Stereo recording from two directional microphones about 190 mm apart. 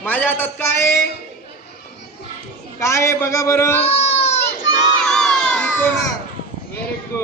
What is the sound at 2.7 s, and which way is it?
A man's voice, 15° left (ahead or behind).